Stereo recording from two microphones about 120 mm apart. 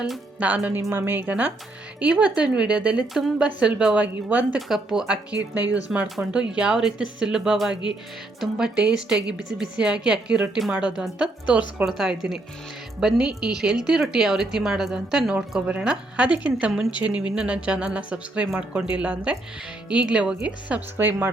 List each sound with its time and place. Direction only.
0.0 s a woman's voice: 10° right (ahead or behind)